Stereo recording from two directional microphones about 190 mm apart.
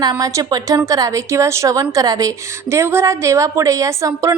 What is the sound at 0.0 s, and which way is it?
A woman's voice, 20° right (ahead or behind).